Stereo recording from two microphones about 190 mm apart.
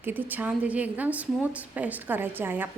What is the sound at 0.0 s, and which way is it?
A woman's voice, 10° right (ahead or behind).